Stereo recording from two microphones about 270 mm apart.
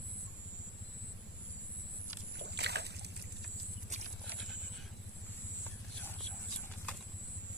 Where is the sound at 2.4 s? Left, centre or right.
Right.